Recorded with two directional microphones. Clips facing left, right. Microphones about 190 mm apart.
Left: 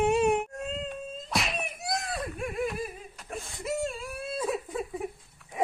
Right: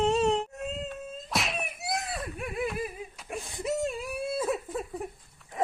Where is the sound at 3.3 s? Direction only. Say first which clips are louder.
Right 2 dB; 20° right (ahead or behind).